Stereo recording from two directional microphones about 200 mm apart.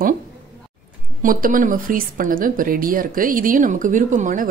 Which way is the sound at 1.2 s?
45° right (ahead or behind).